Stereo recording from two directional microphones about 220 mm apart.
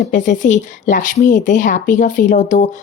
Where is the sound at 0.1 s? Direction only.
35° left (ahead or behind).